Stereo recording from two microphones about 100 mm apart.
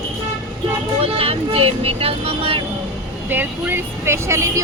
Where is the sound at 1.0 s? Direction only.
80° right.